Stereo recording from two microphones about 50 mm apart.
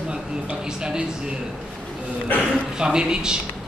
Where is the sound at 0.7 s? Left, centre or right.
Centre.